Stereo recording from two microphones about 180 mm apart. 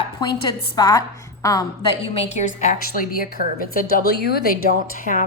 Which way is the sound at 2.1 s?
40° left (ahead or behind).